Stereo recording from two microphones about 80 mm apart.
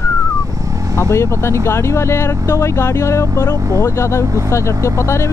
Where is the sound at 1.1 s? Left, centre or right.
Left.